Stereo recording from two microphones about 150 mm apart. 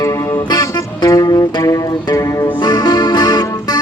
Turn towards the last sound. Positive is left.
turn(degrees=25)  # may be behind; listen again after turning